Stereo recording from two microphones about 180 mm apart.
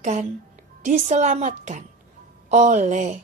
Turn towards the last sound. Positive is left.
turn(degrees=-40)  # may be behind; listen again after turning